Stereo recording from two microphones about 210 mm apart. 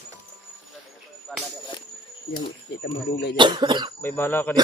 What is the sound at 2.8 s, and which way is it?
Speech, 50° left (ahead or behind).